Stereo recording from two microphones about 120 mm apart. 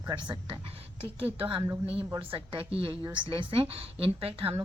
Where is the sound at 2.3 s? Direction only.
50° right (ahead or behind).